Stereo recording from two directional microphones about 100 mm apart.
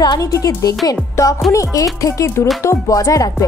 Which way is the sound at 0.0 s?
40° left (ahead or behind).